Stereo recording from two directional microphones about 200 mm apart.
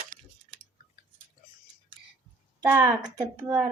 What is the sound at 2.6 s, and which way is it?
Speech, 10° right (ahead or behind).